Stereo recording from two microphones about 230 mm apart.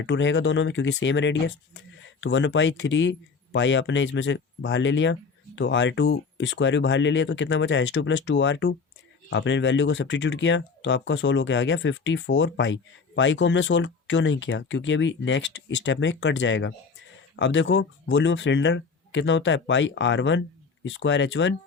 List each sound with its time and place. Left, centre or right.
0.0 s speech: left